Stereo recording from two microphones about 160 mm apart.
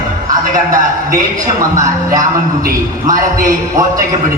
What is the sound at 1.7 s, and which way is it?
Speech, 20° right (ahead or behind).